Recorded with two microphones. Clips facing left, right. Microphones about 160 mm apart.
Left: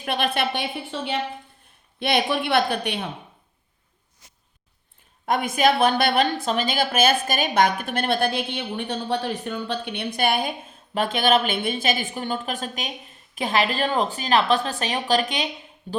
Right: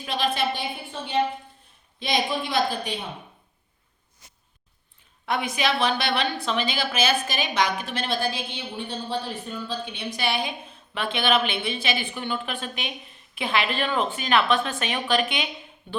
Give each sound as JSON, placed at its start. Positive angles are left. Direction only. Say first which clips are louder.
{"t": 0.0, "sound": "a woman's voice", "louder": "left 1 dB", "side_deg": 60}
{"t": 2.0, "sound": "a woman's voice", "louder": "left 3 dB", "side_deg": 60}
{"t": 5.2, "sound": "a woman's voice", "louder": "left 5 dB", "side_deg": 45}